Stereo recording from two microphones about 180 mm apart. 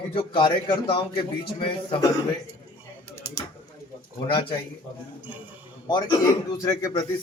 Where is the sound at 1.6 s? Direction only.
30° left (ahead or behind).